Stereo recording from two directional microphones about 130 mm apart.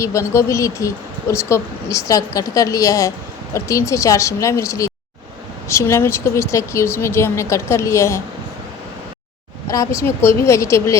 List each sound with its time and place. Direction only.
0.0 s speech: 25° left (ahead or behind)
9.6 s speech: 25° left (ahead or behind)